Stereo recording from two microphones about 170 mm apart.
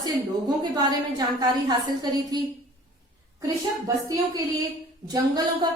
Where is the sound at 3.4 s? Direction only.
20° right (ahead or behind).